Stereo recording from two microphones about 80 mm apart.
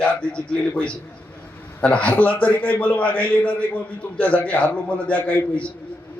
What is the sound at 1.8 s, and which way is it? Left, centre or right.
A man's voice, centre.